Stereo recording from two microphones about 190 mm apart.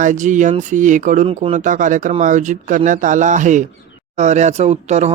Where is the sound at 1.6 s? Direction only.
40° right (ahead or behind).